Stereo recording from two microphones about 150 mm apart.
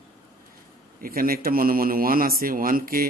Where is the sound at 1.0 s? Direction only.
75° right (ahead or behind).